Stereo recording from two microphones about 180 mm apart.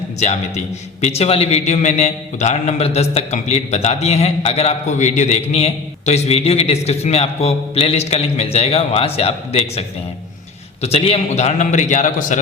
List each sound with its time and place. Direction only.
0.2 s a man's voice: 40° left (ahead or behind)